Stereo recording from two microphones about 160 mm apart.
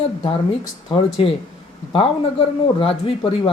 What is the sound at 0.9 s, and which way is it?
Speech, 35° left (ahead or behind).